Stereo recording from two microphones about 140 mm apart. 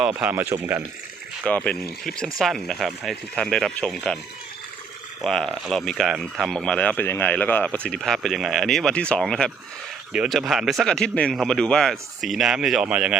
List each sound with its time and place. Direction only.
0.2 s speech: 10° right (ahead or behind)
1.5 s speech: 10° left (ahead or behind)
5.2 s speech: 5° left (ahead or behind)